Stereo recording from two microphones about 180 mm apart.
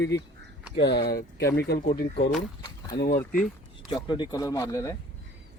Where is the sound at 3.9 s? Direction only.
25° left (ahead or behind).